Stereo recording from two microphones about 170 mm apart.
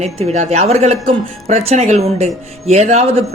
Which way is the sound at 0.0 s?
40° right (ahead or behind).